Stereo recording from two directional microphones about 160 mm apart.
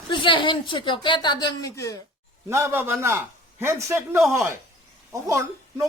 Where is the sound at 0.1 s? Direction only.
30° left (ahead or behind).